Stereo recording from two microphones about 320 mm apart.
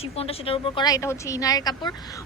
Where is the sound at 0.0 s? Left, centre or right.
Centre.